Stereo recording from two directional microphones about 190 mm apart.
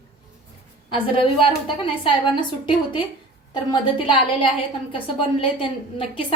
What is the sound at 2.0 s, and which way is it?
A woman's voice, 25° left (ahead or behind).